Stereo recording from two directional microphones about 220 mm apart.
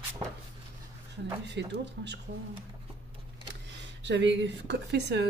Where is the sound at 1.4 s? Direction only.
50° right (ahead or behind).